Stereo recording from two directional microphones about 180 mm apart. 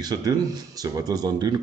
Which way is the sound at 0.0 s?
20° right (ahead or behind).